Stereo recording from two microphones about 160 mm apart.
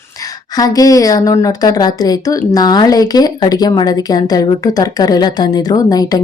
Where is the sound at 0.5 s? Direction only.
20° left (ahead or behind).